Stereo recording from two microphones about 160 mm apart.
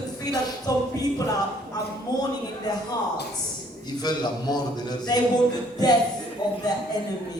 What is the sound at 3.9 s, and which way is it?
A man's voice, 25° left (ahead or behind).